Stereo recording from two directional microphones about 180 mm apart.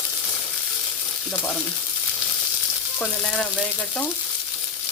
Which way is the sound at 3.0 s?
5° left (ahead or behind).